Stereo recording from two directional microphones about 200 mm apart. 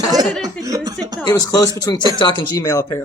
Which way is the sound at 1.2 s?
20° left (ahead or behind).